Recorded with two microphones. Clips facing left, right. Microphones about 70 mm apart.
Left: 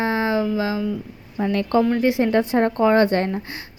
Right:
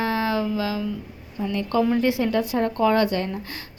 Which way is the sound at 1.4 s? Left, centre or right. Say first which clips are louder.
Left 5 dB; left.